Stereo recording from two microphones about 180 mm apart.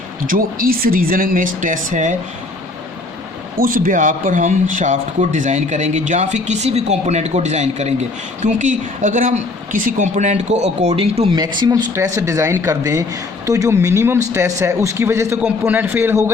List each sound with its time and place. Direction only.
0.3 s speech: 50° right (ahead or behind)
3.6 s speech: 50° right (ahead or behind); by 11.3 s 35° right (ahead or behind)
11.3 s speech: 25° right (ahead or behind)